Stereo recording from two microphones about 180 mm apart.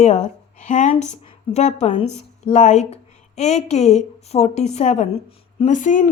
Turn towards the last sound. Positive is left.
turn(degrees=45)  # may be behind; listen again after turning